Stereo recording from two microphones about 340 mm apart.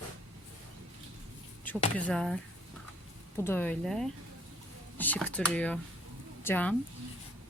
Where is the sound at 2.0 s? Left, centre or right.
Centre.